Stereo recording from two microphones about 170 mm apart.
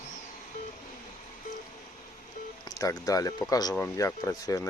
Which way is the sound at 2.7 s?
20° left (ahead or behind).